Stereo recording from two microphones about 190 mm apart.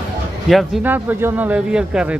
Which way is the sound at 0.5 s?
5° right (ahead or behind).